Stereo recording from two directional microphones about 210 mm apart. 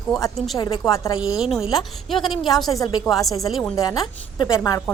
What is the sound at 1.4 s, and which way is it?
A woman's voice, centre (ahead or behind).